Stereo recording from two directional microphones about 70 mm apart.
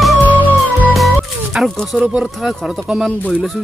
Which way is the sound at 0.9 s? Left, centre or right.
Centre.